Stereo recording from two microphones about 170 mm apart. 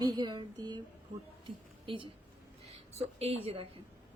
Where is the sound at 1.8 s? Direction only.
30° right (ahead or behind).